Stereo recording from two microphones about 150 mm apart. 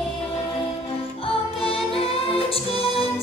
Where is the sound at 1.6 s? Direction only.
40° left (ahead or behind).